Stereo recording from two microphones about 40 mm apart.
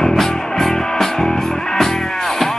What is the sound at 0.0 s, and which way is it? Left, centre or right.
Music, centre.